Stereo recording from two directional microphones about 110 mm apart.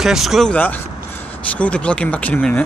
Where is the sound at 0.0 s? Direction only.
5° right (ahead or behind).